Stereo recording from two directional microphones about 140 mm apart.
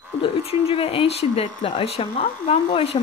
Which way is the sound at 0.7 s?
45° left (ahead or behind).